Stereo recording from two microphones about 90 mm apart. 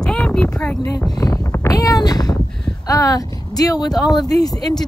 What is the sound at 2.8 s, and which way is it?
A woman's voice, 40° left (ahead or behind).